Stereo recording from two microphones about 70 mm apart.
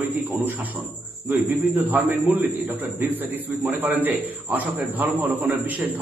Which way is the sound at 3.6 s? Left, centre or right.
Right.